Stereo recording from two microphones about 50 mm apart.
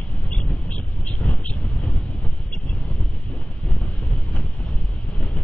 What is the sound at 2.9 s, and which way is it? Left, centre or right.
Wind noise, left.